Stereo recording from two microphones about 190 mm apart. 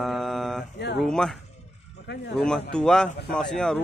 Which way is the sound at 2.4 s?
5° left (ahead or behind).